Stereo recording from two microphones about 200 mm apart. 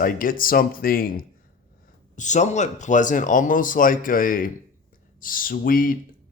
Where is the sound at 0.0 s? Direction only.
45° left (ahead or behind).